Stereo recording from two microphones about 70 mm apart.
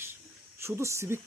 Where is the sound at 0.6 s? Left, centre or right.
Right.